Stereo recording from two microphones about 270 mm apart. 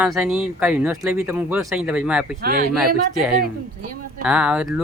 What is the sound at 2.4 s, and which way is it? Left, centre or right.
Speech, right.